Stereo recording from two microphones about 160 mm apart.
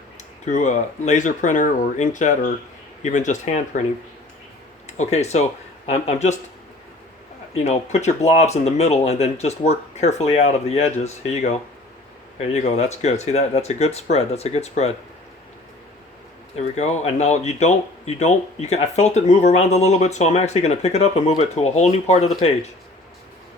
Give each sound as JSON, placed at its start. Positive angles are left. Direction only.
{"t": 0.5, "sound": "speech", "side_deg": 50}
{"t": 4.9, "sound": "speech", "side_deg": 45}
{"t": 7.5, "sound": "speech", "side_deg": 45}
{"t": 12.5, "sound": "speech", "side_deg": 45}
{"t": 16.7, "sound": "speech", "side_deg": 45}